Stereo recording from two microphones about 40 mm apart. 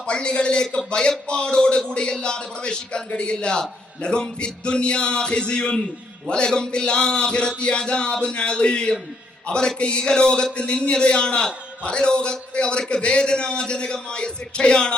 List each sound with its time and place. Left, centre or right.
0.0 s a man's voice: left